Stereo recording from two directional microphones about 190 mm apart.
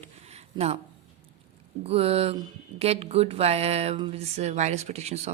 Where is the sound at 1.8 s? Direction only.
30° right (ahead or behind).